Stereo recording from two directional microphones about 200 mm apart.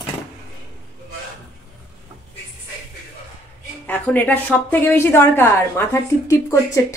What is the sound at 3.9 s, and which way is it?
A woman's voice, 10° left (ahead or behind).